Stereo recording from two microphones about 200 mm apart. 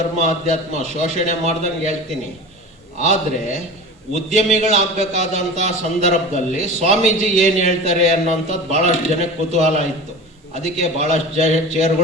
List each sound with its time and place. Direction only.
0.2 s a man's voice: 35° right (ahead or behind)
3.0 s a man's voice: 35° right (ahead or behind)